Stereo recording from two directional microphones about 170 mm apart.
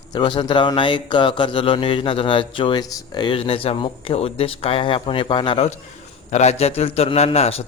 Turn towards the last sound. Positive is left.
turn(degrees=35)  # may be behind; listen again after turning